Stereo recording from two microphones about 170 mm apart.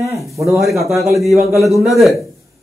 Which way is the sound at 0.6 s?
Centre (ahead or behind).